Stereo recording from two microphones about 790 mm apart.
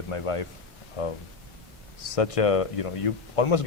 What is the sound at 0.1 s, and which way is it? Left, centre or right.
Speech, left.